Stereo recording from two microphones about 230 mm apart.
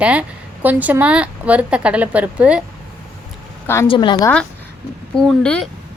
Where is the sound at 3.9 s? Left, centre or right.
Left.